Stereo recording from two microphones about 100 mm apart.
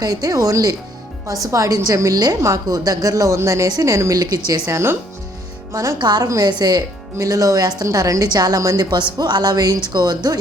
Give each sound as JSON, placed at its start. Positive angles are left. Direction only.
{"t": 0.0, "sound": "a woman's voice", "side_deg": -40}
{"t": 6.0, "sound": "a woman's voice", "side_deg": -45}